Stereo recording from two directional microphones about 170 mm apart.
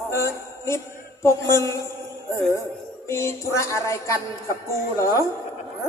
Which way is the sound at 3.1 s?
15° left (ahead or behind).